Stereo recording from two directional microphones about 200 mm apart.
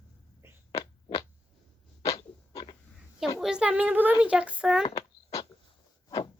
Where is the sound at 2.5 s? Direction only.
25° left (ahead or behind).